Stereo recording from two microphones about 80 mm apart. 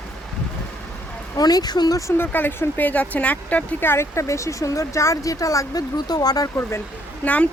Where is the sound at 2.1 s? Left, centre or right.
Left.